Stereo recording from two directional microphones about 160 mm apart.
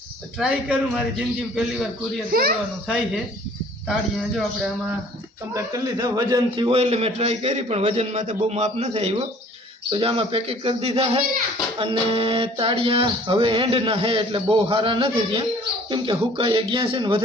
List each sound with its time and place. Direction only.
0.3 s a man's voice: 5° right (ahead or behind)
2.3 s a child's voice: 65° right (ahead or behind)
4.4 s a man's voice: 5° right (ahead or behind)
5.5 s a man's voice: 25° right (ahead or behind)
6.7 s a sound: 40° right (ahead or behind)